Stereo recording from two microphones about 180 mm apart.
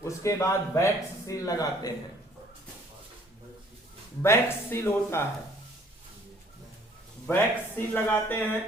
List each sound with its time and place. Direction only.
0.0 s a man's voice: 15° left (ahead or behind)
4.2 s a man's voice: 15° left (ahead or behind)
7.3 s a man's voice: 15° left (ahead or behind)